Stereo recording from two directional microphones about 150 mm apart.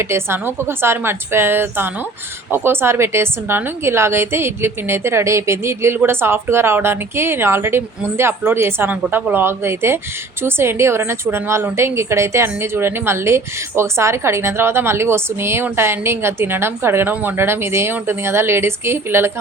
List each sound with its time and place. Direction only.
0.0 s a woman's voice: 15° right (ahead or behind)